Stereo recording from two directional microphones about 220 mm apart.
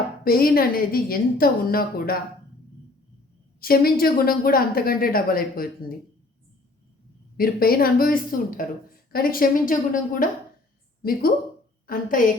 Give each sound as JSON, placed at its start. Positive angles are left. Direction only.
{"t": 0.3, "sound": "a woman's voice", "side_deg": 40}
{"t": 3.6, "sound": "a woman's voice", "side_deg": 40}
{"t": 7.3, "sound": "a woman's voice", "side_deg": 40}
{"t": 11.9, "sound": "a woman's voice", "side_deg": 40}